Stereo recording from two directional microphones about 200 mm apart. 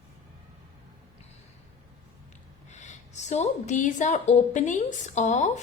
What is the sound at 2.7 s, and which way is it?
A woman's voice, 35° left (ahead or behind).